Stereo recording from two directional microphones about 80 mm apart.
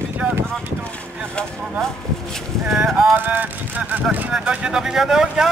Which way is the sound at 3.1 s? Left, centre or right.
Right.